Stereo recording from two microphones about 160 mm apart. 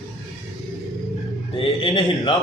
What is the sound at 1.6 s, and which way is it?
Mantra, 35° left (ahead or behind).